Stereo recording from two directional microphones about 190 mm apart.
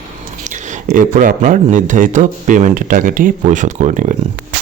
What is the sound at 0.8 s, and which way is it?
Speech, 45° right (ahead or behind).